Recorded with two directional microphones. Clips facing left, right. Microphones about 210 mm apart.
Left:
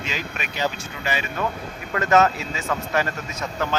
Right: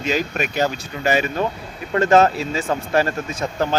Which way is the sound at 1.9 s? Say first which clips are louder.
Right 4 dB; 30° right (ahead or behind).